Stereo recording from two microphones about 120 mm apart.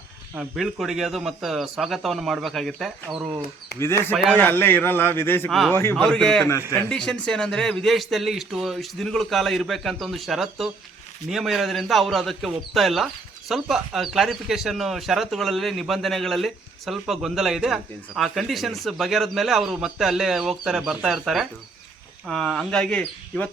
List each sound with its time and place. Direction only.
0.3 s speech: centre (ahead or behind)
3.8 s speech: 25° left (ahead or behind)
4.2 s a man's voice: 10° left (ahead or behind)
5.5 s speech: centre (ahead or behind)
5.7 s speech: 20° left (ahead or behind)
6.0 s a man's voice: 5° left (ahead or behind)